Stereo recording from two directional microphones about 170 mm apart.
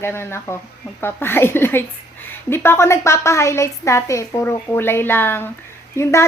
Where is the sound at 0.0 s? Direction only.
15° left (ahead or behind).